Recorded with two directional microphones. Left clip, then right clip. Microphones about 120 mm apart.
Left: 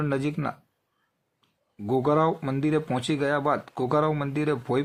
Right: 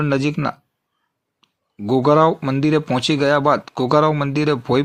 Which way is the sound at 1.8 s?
30° right (ahead or behind).